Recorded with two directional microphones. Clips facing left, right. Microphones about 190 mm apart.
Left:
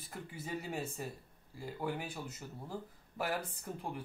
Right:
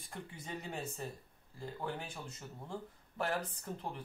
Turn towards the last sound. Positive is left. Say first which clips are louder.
# left 1 dB
turn(degrees=10)  # may be behind; listen again after turning